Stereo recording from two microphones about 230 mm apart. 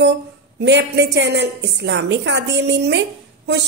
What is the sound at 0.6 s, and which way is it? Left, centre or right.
A woman's voice, right.